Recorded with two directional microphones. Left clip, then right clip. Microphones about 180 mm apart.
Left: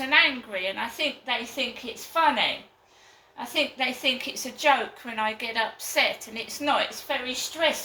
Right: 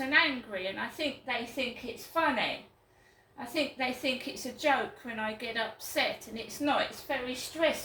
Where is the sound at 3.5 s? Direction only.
10° right (ahead or behind).